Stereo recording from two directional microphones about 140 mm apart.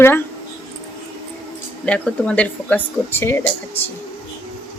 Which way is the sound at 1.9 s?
10° left (ahead or behind).